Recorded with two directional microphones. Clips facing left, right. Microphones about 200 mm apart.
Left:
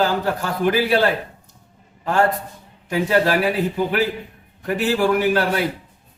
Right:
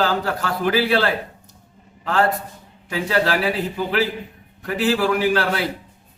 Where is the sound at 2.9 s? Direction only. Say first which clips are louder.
Left 3 dB; 15° left (ahead or behind).